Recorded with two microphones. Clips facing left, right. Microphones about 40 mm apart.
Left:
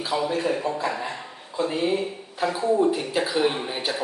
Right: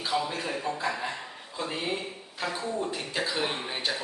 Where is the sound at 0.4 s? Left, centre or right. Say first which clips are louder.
Left 6 dB; centre.